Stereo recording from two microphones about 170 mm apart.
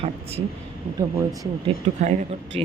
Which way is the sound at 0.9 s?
20° right (ahead or behind).